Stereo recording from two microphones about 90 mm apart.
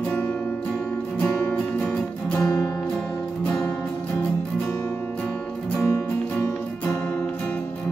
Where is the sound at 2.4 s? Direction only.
40° left (ahead or behind).